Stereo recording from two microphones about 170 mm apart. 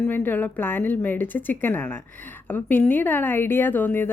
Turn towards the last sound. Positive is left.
turn(degrees=10)  # may be behind; listen again after turning